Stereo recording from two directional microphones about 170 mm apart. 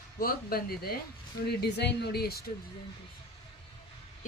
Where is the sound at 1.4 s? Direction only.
75° left (ahead or behind).